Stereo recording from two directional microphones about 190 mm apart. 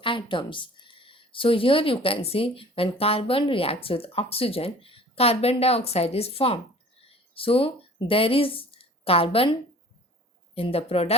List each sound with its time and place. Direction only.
0.0 s a woman's voice: 25° left (ahead or behind)